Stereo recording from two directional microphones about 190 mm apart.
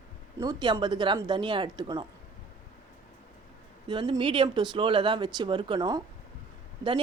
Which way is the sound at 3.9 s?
25° right (ahead or behind).